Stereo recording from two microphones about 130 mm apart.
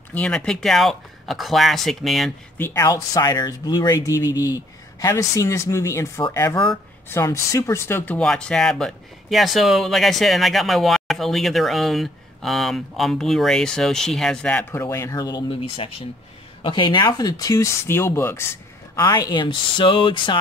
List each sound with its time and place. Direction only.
0.1 s speech: 5° left (ahead or behind)
2.7 s speech: 30° left (ahead or behind)
16.6 s speech: 40° left (ahead or behind)